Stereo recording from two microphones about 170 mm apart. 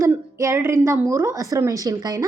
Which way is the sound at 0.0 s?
15° right (ahead or behind).